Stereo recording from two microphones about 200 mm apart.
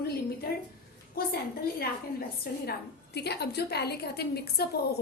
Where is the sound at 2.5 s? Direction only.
50° left (ahead or behind).